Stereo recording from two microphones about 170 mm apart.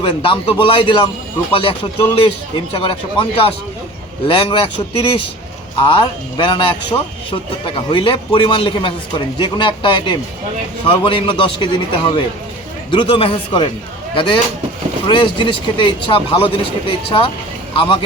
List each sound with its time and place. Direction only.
0.0 s speech: 30° left (ahead or behind)
6.0 s speech: 30° left (ahead or behind)